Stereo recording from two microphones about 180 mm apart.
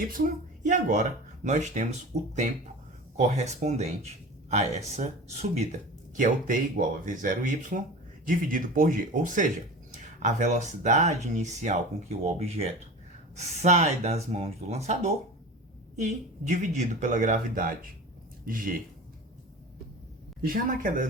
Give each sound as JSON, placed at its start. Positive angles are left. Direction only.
{"t": 0.6, "sound": "speech", "side_deg": -45}
{"t": 20.4, "sound": "speech", "side_deg": -50}